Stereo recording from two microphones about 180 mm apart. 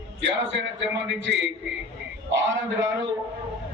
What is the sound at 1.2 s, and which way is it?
Speech, 80° right.